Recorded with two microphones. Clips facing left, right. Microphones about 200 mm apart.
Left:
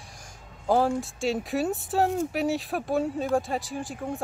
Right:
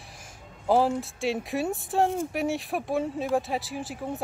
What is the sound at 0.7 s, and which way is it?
Speech, centre (ahead or behind).